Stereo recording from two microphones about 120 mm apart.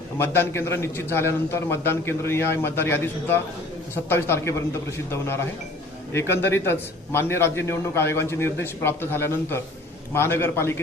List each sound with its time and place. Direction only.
0.2 s a man's voice: 20° left (ahead or behind)